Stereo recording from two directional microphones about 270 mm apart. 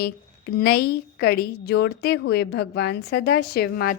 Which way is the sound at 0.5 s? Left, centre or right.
Left.